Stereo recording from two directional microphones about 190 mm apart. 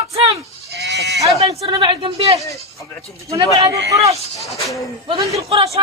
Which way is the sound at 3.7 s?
15° right (ahead or behind).